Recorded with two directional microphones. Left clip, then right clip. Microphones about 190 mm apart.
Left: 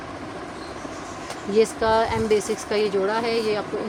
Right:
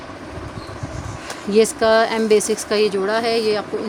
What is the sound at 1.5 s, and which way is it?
Speech, 55° right (ahead or behind).